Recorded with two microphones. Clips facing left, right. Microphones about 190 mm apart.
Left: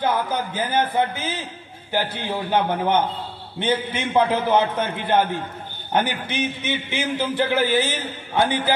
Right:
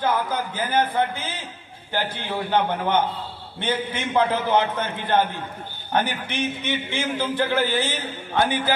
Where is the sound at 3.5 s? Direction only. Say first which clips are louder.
Left 3 dB; 10° left (ahead or behind).